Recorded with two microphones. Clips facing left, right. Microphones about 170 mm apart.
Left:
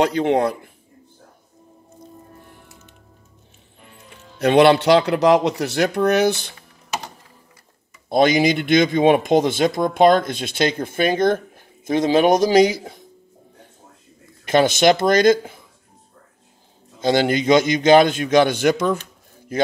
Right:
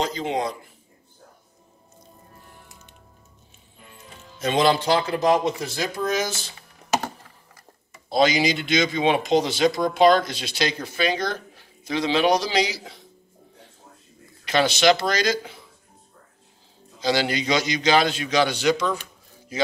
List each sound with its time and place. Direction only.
0.0 s speech: 65° left (ahead or behind)
4.4 s speech: 65° left (ahead or behind)
8.1 s speech: 55° left (ahead or behind)
14.4 s speech: 50° left (ahead or behind)
17.0 s speech: 50° left (ahead or behind)